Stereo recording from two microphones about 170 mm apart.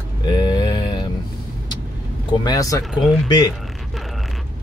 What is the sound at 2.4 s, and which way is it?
Speech, 20° left (ahead or behind).